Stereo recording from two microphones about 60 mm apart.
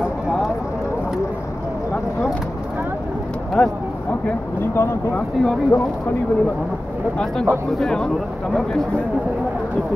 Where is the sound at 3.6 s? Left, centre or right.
Centre.